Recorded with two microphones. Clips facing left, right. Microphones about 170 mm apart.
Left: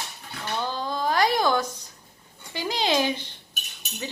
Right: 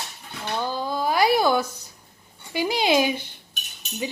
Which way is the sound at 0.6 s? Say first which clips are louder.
Right 2 dB; 10° right (ahead or behind).